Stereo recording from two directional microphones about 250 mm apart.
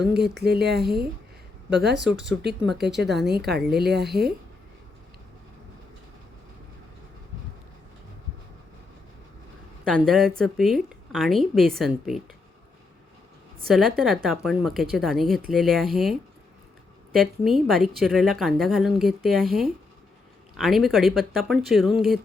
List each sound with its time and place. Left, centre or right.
0.0 s speech: right
9.8 s a woman's voice: centre
13.7 s a woman's voice: centre